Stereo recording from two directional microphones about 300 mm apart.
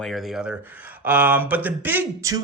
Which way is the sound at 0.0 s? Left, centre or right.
Centre.